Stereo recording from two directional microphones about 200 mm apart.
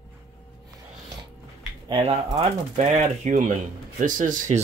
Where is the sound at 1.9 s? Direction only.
30° right (ahead or behind).